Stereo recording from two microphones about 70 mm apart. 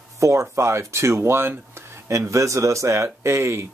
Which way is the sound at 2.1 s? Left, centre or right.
Right.